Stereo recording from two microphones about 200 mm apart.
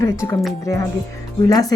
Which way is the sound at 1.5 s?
20° left (ahead or behind).